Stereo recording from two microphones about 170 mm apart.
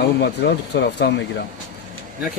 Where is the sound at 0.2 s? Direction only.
80° left.